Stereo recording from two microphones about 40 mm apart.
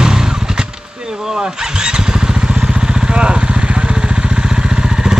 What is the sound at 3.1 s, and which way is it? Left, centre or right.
Vehicle, right.